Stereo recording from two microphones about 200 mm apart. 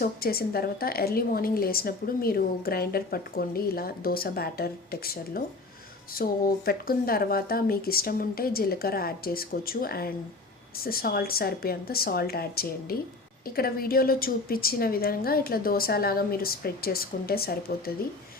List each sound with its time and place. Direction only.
0.0 s a woman's voice: 50° left (ahead or behind)